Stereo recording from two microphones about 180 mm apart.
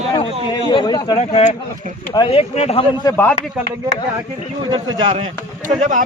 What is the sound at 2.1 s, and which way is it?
Speech, 25° left (ahead or behind).